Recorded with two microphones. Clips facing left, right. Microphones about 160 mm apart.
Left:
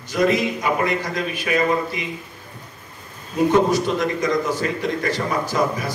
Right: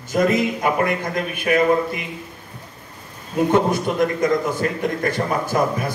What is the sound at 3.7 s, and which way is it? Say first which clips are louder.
A man's voice: right 1 dB; 55° right (ahead or behind).